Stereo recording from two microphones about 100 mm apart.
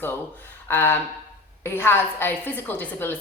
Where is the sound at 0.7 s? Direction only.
20° left (ahead or behind).